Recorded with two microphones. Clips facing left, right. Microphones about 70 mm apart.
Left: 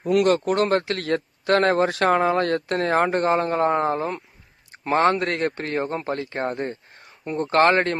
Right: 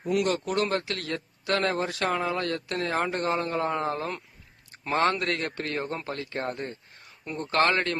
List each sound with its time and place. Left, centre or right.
0.0 s a man's voice: left